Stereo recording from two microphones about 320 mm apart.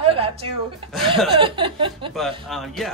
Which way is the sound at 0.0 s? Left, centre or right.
Centre.